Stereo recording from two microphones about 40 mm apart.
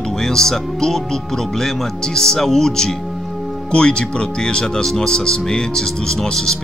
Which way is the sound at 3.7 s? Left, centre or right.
Left.